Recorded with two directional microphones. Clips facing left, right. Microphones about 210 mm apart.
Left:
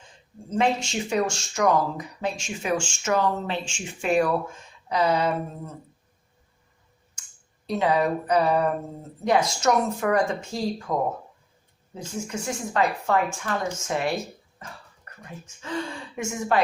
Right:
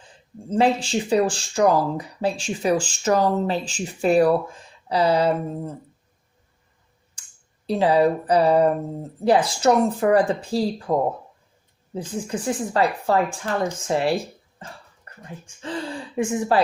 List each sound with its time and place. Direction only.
0.5 s speech: 30° right (ahead or behind)
7.2 s a sound: 30° right (ahead or behind)
7.7 s speech: 30° right (ahead or behind)
11.9 s speech: 35° right (ahead or behind)
15.1 s dog: 30° right (ahead or behind)
15.6 s speech: 35° right (ahead or behind)